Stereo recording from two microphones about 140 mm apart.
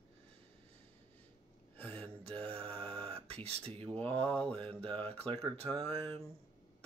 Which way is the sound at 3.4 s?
45° right (ahead or behind).